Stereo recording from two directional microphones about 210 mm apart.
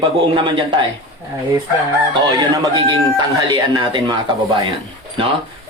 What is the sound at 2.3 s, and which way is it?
Speech, 20° right (ahead or behind).